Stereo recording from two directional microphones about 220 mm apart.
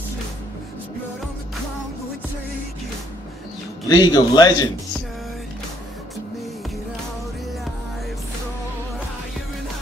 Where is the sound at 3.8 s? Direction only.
15° left (ahead or behind).